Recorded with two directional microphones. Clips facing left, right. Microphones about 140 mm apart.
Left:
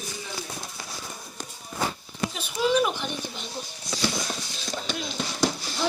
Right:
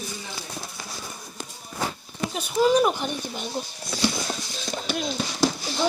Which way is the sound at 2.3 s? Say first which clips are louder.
Right 5 dB; 45° right (ahead or behind).